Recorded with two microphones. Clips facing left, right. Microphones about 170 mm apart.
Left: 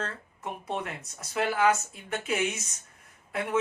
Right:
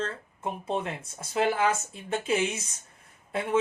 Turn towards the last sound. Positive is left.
turn(degrees=-30)  # may be behind; listen again after turning